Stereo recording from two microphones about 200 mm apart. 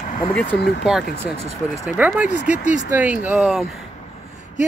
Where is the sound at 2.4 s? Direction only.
40° left (ahead or behind).